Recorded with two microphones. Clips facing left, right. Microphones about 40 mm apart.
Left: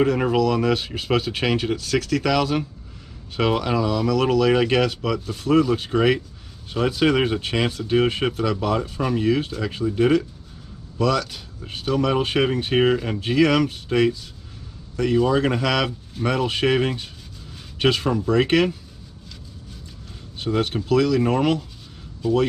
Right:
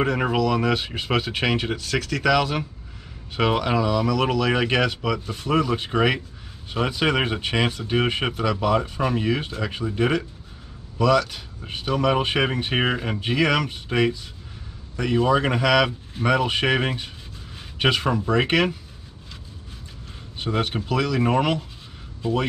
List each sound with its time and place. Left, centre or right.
0.0 s speech: centre
20.3 s a man's voice: centre